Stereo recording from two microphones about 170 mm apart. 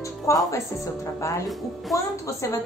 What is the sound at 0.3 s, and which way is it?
Speech, 15° left (ahead or behind).